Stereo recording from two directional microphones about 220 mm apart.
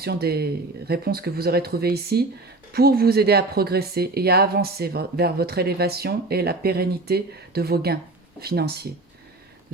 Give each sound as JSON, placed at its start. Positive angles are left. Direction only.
{"t": 0.0, "sound": "speech", "side_deg": -45}